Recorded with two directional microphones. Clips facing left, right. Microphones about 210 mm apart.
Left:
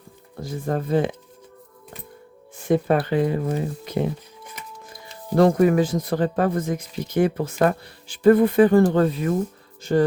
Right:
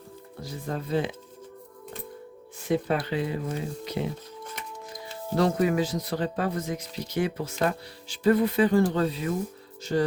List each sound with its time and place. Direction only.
0.4 s speech: 50° left (ahead or behind)
2.6 s speech: 50° left (ahead or behind)
5.4 s speech: 50° left (ahead or behind)